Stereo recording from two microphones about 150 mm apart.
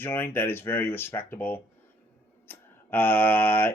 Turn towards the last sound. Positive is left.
turn(degrees=15)  # may be behind; listen again after turning